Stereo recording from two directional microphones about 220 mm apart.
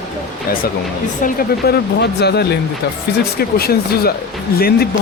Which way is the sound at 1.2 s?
45° left (ahead or behind).